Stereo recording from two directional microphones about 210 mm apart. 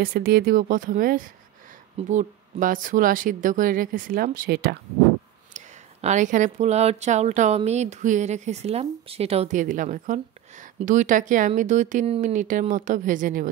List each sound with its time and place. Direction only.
0.0 s speech: 45° right (ahead or behind)
5.5 s speech: 35° right (ahead or behind)